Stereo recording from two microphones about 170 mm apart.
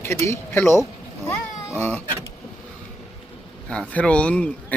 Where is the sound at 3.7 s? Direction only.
5° left (ahead or behind).